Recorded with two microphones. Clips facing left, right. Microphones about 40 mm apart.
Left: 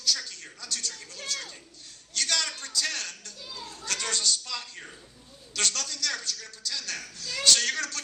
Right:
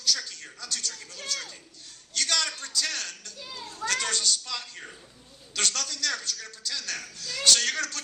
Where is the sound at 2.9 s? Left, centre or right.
Right.